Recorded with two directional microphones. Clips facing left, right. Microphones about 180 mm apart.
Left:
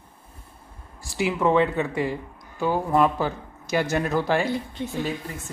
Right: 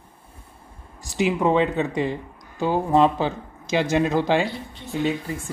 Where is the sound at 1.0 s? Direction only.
20° right (ahead or behind).